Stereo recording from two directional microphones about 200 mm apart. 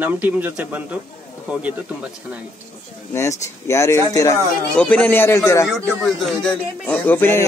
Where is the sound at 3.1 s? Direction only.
15° left (ahead or behind).